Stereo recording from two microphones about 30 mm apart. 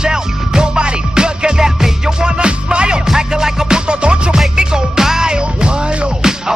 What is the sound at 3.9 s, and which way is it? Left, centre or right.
Music, right.